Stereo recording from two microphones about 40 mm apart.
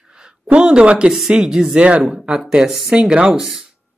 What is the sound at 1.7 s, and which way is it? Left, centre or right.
Speech, right.